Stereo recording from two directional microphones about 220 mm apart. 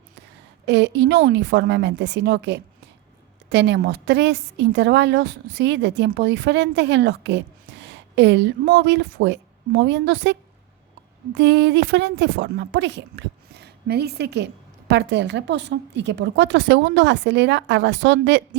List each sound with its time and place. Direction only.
0.6 s a woman's voice: 50° right (ahead or behind)
11.3 s a woman's voice: 50° right (ahead or behind)